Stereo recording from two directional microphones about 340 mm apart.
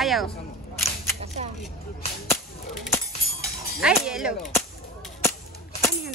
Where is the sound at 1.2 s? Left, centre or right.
Centre.